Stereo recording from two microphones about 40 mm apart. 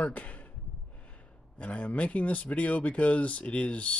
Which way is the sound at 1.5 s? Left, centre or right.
Left.